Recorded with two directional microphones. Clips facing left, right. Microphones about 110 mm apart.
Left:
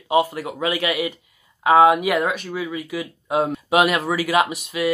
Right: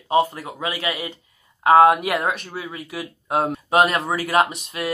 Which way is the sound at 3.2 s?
50° right (ahead or behind).